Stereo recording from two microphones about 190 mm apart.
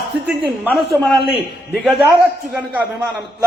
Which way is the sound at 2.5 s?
5° right (ahead or behind).